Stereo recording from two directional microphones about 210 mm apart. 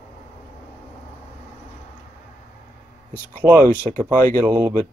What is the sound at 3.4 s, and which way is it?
Speech, 10° right (ahead or behind).